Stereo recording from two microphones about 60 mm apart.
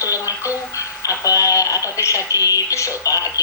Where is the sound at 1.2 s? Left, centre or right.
Left.